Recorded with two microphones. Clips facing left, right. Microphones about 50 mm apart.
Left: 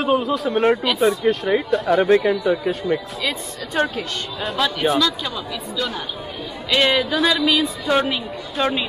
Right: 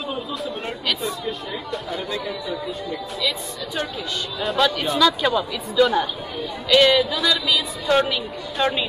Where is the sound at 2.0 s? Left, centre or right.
Left.